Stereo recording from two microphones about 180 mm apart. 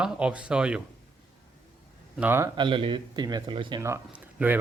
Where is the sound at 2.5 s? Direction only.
25° right (ahead or behind).